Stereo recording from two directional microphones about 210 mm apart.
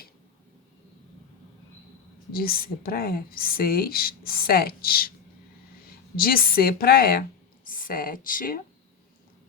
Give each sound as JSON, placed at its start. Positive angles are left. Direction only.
{"t": 2.3, "sound": "a woman's voice", "side_deg": 45}
{"t": 6.1, "sound": "speech", "side_deg": 45}